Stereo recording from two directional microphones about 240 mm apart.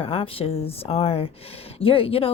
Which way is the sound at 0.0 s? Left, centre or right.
Left.